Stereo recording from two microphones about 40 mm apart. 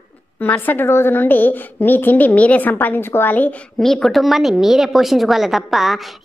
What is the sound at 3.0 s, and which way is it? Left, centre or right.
Speech, left.